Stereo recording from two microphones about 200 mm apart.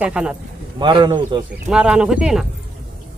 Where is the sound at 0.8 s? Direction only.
25° right (ahead or behind).